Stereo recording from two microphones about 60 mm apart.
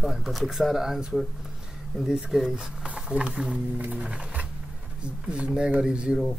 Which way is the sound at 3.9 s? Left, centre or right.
Centre.